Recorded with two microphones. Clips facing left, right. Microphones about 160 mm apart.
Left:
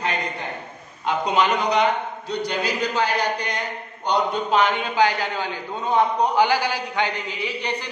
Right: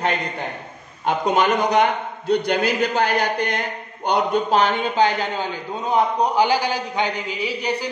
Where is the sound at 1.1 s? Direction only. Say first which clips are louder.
Right 2 dB; 50° right (ahead or behind).